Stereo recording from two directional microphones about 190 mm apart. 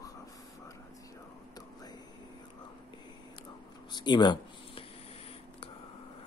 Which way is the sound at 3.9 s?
25° left (ahead or behind).